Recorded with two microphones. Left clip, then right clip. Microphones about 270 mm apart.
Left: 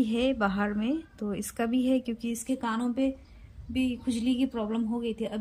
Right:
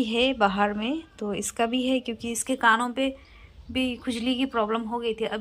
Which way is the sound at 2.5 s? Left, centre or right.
Centre.